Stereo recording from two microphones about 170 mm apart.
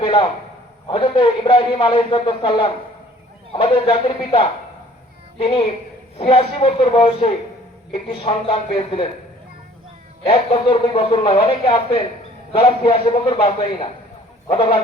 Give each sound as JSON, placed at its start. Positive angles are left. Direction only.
{"t": 0.0, "sound": "a sound", "side_deg": 35}
{"t": 0.9, "sound": "a man's voice", "side_deg": 30}
{"t": 10.2, "sound": "a man's voice", "side_deg": 35}